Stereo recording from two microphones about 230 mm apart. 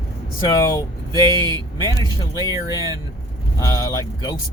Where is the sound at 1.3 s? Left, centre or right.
Centre.